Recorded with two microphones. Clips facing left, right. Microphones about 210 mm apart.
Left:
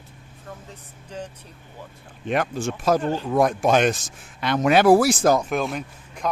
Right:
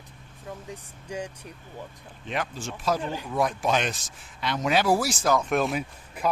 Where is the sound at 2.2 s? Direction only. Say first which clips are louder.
Left 8 dB; 55° left (ahead or behind).